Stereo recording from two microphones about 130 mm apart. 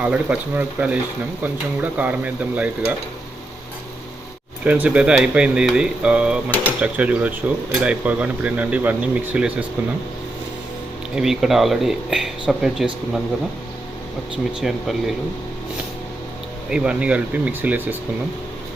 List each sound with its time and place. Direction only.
0.0 s speech: 10° right (ahead or behind)
4.6 s speech: 10° right (ahead or behind)
11.1 s speech: 5° right (ahead or behind)
14.6 s speech: centre (ahead or behind)
16.6 s speech: 5° right (ahead or behind)